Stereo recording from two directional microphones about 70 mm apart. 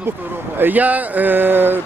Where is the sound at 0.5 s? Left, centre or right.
Right.